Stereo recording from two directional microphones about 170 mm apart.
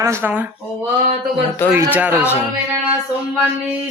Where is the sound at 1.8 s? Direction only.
10° right (ahead or behind).